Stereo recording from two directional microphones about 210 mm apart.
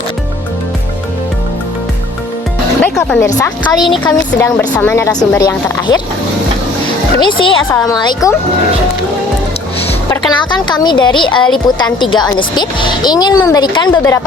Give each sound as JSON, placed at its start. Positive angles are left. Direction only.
{"t": 2.8, "sound": "music", "side_deg": 10}
{"t": 3.3, "sound": "speech", "side_deg": 15}
{"t": 3.8, "sound": "a woman's voice", "side_deg": 0}
{"t": 4.4, "sound": "speech", "side_deg": 15}
{"t": 7.2, "sound": "speech", "side_deg": 25}
{"t": 10.1, "sound": "speech", "side_deg": 20}